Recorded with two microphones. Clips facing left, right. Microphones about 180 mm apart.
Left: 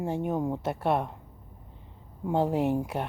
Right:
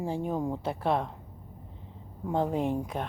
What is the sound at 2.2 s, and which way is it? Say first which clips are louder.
Speech: left 2 dB; 10° left (ahead or behind).